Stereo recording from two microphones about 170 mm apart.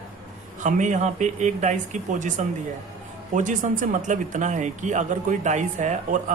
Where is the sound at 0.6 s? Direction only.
45° right (ahead or behind).